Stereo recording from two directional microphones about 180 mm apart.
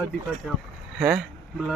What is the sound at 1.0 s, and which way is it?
Speech, 5° right (ahead or behind).